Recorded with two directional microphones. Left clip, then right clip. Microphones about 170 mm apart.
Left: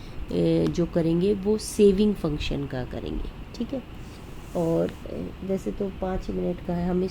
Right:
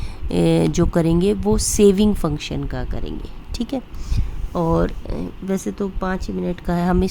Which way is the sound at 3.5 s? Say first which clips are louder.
Right 6 dB; 45° right (ahead or behind).